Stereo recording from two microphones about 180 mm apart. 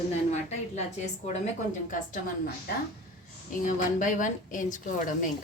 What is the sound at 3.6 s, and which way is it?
A woman's voice, 45° left (ahead or behind).